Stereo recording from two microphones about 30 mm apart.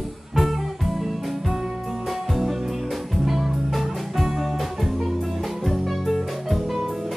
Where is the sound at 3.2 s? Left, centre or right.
Centre.